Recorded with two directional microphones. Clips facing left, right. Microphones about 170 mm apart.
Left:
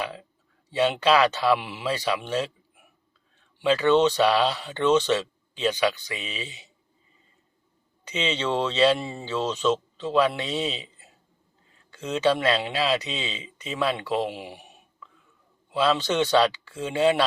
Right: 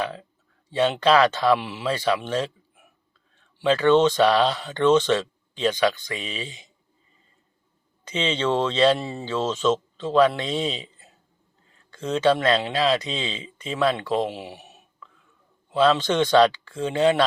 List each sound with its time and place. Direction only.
0.8 s speech: 10° left (ahead or behind)
3.6 s speech: 10° left (ahead or behind)
6.1 s speech: 40° right (ahead or behind)
8.0 s speech: 10° left (ahead or behind)
11.9 s speech: 10° left (ahead or behind)
13.1 s speech: 35° right (ahead or behind)
13.7 s speech: 10° left (ahead or behind)
15.7 s speech: 10° left (ahead or behind)